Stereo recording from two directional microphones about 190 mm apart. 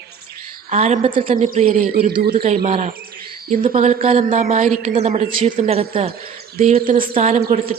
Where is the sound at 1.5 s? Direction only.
40° right (ahead or behind).